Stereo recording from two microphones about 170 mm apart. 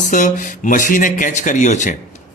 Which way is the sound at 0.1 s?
50° left (ahead or behind).